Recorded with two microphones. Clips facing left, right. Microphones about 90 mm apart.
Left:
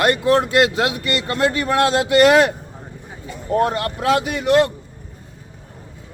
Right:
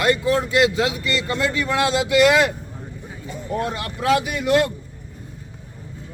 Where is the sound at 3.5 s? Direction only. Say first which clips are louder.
Left 7 dB; 50° left (ahead or behind).